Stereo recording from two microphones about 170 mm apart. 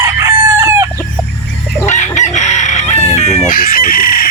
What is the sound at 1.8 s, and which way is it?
Chicken, 45° left (ahead or behind).